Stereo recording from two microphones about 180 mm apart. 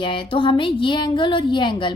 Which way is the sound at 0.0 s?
30° left (ahead or behind).